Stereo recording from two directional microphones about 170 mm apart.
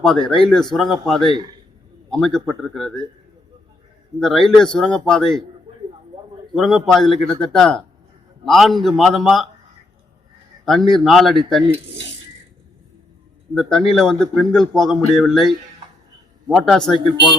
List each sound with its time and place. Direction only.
0.0 s a man's voice: 5° left (ahead or behind)
1.3 s speech: 25° right (ahead or behind)
2.0 s a man's voice: centre (ahead or behind)
4.2 s a man's voice: centre (ahead or behind)
6.5 s a man's voice: centre (ahead or behind)
10.7 s a man's voice: centre (ahead or behind)
13.5 s a man's voice: centre (ahead or behind)